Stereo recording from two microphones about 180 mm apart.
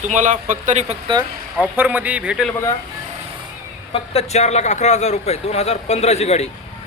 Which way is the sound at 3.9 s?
35° left (ahead or behind).